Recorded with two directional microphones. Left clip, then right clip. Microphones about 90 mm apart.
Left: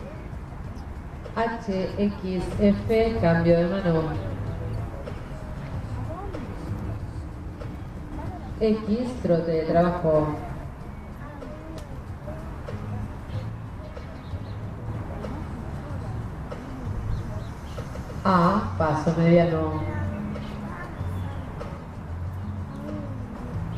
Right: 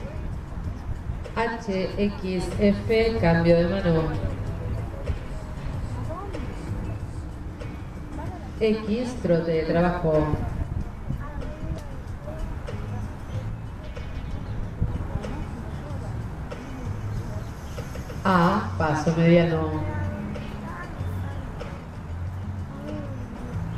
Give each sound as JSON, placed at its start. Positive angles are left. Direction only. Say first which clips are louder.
{"t": 1.4, "sound": "a woman's voice", "louder": "even", "side_deg": -35}
{"t": 8.5, "sound": "a woman's voice", "louder": "even", "side_deg": -40}
{"t": 18.2, "sound": "speech", "louder": "even", "side_deg": -40}